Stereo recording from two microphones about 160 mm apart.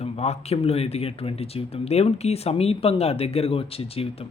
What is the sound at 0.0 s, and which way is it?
Speech, 40° left (ahead or behind).